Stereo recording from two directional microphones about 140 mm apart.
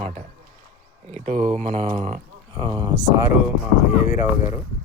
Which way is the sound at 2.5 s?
30° right (ahead or behind).